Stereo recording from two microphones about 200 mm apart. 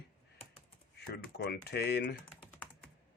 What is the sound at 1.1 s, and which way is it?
Speech, 55° left (ahead or behind).